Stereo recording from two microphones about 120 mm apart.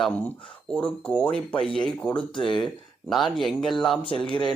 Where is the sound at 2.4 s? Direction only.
40° left (ahead or behind).